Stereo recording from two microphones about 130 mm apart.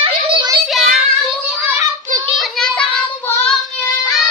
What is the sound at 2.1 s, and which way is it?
Child singing, 90° right.